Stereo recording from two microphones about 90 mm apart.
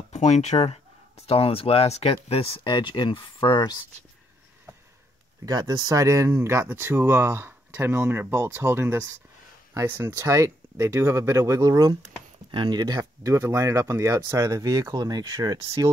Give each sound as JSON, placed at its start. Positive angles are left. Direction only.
{"t": 0.5, "sound": "speech", "side_deg": 55}
{"t": 1.4, "sound": "speech", "side_deg": 90}
{"t": 2.6, "sound": "speech", "side_deg": 55}
{"t": 5.4, "sound": "speech", "side_deg": -45}
{"t": 12.4, "sound": "speech", "side_deg": -60}